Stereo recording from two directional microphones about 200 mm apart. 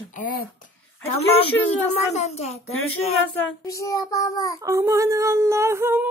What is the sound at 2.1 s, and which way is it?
Child singing, 35° left (ahead or behind).